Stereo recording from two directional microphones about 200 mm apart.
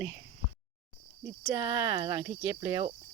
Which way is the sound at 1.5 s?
15° right (ahead or behind).